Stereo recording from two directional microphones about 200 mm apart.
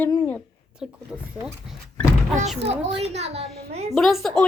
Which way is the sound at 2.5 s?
30° right (ahead or behind).